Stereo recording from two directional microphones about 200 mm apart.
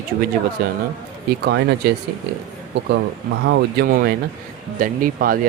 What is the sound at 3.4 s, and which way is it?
Speech, 60° right (ahead or behind).